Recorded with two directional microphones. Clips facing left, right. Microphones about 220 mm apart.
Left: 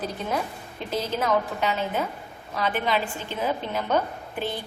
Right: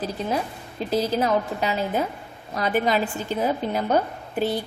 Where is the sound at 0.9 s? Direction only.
35° right (ahead or behind).